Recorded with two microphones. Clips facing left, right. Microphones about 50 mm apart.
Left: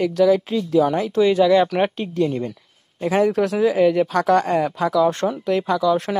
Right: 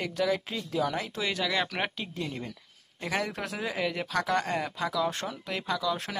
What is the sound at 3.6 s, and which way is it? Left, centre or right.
Speech, centre.